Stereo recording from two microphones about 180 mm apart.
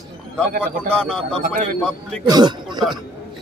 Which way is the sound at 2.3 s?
25° right (ahead or behind).